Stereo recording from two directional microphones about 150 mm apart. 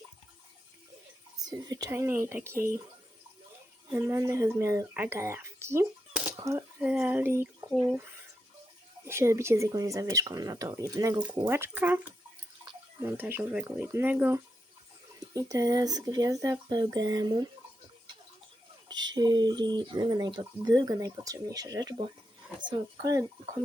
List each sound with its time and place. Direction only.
1.4 s speech: 25° right (ahead or behind)
3.8 s speech: 15° right (ahead or behind)
9.0 s speech: 20° right (ahead or behind)
15.2 s speech: 25° right (ahead or behind)
18.9 s speech: 30° right (ahead or behind)